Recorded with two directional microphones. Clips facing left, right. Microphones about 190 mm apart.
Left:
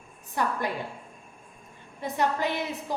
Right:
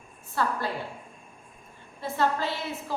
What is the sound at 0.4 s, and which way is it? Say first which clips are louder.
Speech: even; 15° left (ahead or behind).